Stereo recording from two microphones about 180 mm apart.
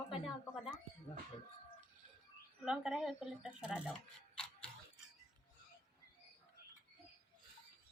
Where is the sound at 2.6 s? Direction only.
5° right (ahead or behind).